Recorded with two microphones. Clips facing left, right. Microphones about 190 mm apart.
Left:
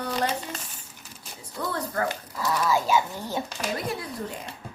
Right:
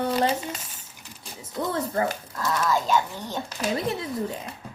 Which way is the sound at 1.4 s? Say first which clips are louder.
Right 3 dB; 25° right (ahead or behind).